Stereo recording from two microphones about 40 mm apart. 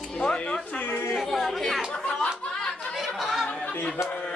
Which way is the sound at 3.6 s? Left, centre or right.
Left.